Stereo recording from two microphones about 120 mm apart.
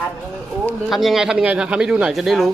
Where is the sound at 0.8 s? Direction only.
Centre (ahead or behind).